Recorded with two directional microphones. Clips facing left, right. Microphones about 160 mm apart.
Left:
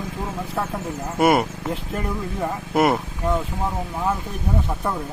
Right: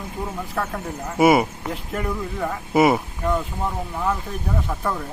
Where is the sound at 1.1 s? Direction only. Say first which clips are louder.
Right 2 dB; centre (ahead or behind).